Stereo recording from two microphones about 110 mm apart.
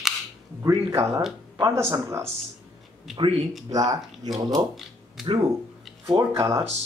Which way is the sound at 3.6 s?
35° right (ahead or behind).